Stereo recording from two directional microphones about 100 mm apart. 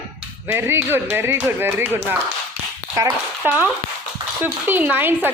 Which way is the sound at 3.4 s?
15° right (ahead or behind).